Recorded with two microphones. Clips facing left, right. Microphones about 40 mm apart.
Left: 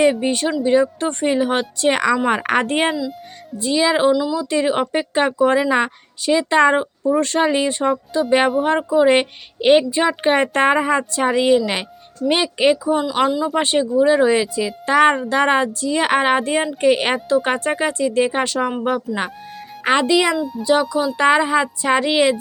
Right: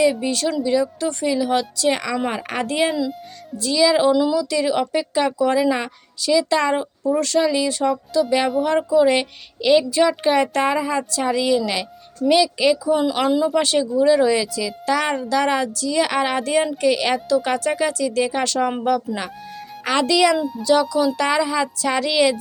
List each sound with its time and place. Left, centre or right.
0.0 s a woman's voice: left
2.9 s speech: centre
3.6 s speech: left
4.1 s speech: centre
4.4 s a woman's voice: left
9.9 s a woman's voice: left
16.8 s speech: left
18.4 s speech: centre
19.1 s speech: centre
20.0 s speech: left
21.2 s speech: left